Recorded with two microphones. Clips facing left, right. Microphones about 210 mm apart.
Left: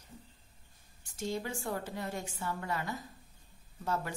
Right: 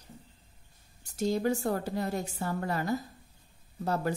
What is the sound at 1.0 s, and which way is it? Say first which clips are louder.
A woman's voice: right 8 dB; 40° right (ahead or behind).